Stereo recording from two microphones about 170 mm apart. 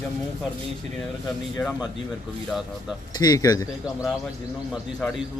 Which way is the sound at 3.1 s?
25° left (ahead or behind).